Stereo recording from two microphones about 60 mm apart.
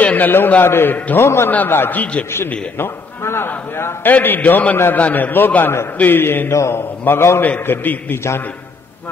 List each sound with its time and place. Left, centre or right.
0.0 s a sound: left
0.7 s a man's voice: left
1.7 s a man's voice: left
2.8 s a man's voice: left
6.5 s a man's voice: left
7.1 s a man's voice: left